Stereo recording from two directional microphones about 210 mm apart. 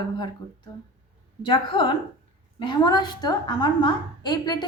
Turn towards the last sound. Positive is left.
turn(degrees=20)  # may be behind; listen again after turning